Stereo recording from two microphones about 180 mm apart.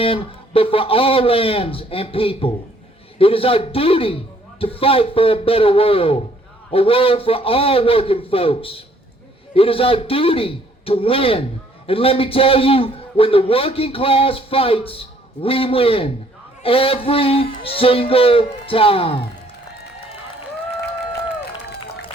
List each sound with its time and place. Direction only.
0.0 s a man's voice: 30° left (ahead or behind)